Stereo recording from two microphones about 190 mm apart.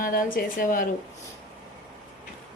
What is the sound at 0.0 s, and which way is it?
Speech, 50° left (ahead or behind).